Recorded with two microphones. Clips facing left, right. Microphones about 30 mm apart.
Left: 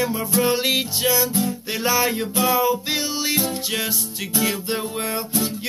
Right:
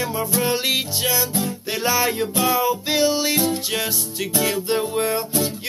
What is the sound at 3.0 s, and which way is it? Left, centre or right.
Music, right.